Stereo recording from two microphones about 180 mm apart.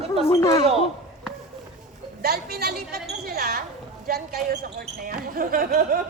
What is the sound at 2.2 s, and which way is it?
A woman's voice, 60° right (ahead or behind).